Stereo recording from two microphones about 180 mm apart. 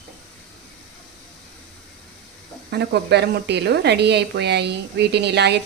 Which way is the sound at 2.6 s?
65° right (ahead or behind).